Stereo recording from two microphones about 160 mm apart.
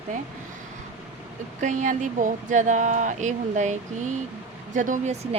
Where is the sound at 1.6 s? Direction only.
50° right (ahead or behind).